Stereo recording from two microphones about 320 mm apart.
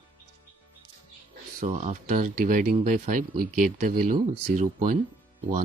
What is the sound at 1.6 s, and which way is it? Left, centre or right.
Speech, right.